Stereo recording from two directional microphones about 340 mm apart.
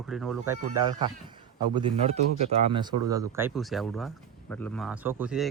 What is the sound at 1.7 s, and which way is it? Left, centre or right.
A man's voice, centre.